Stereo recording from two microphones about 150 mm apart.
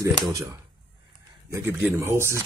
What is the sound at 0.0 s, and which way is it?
Speech, 25° right (ahead or behind).